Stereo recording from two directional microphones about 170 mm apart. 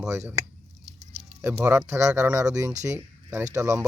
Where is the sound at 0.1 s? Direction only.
15° right (ahead or behind).